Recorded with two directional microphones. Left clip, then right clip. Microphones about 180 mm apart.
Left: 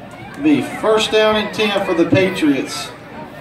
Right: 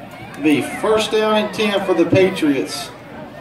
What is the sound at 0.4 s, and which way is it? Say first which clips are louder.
A man's voice: left 1 dB; 25° left (ahead or behind).